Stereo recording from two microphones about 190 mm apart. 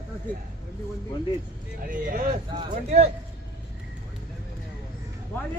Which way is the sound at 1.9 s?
45° right (ahead or behind).